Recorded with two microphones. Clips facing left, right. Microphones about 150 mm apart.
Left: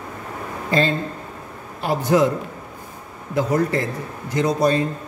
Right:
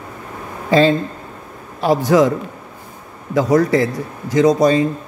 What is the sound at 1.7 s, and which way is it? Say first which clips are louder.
Speech: right 5 dB; 90° right.